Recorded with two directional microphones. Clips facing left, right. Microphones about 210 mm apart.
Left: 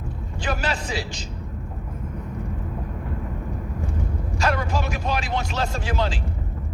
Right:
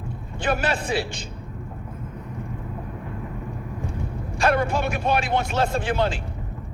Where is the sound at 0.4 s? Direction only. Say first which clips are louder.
Right 3 dB; 55° right (ahead or behind).